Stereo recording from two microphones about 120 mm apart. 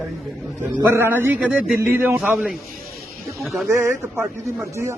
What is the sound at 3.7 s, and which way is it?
Speech, 20° right (ahead or behind).